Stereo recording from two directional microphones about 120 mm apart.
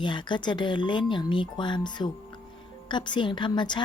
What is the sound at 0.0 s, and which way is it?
A woman's voice, 40° left (ahead or behind).